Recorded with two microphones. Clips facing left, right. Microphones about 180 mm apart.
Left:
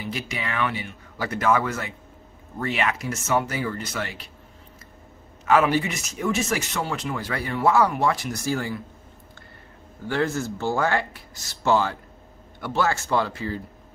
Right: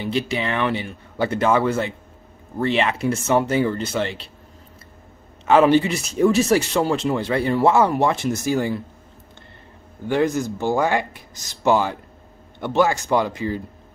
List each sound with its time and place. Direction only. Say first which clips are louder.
0.0 s speech: right 8 dB; 30° right (ahead or behind)
5.4 s speech: right 5 dB; 30° right (ahead or behind)
10.0 s speech: right 5 dB; 15° right (ahead or behind)